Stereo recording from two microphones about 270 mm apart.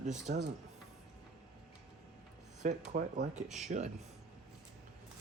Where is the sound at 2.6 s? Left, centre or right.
Right.